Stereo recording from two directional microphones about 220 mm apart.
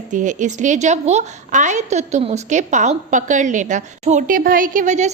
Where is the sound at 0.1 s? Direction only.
35° right (ahead or behind).